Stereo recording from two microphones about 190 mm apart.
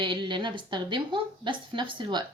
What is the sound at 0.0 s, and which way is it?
Speech, 25° right (ahead or behind).